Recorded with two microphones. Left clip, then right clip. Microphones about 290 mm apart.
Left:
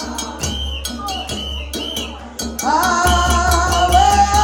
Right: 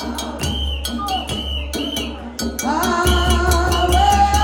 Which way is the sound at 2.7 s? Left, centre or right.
Left.